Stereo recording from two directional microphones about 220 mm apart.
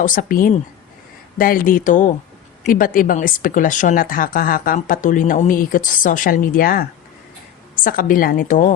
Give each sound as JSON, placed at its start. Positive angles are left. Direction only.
{"t": 0.0, "sound": "speech", "side_deg": 40}
{"t": 7.9, "sound": "speech", "side_deg": 40}